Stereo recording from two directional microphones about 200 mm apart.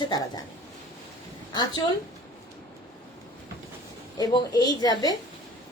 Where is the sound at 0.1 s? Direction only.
20° left (ahead or behind).